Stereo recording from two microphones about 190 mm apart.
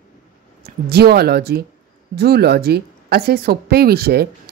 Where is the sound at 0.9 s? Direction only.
55° right (ahead or behind).